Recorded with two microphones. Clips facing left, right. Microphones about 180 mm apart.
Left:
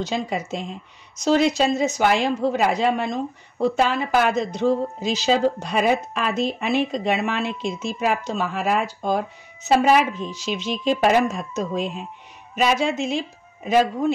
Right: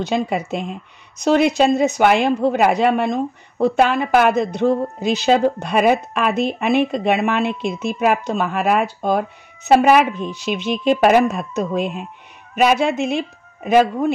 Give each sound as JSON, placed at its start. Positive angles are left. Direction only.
{"t": 0.0, "sound": "a woman's voice", "side_deg": -60}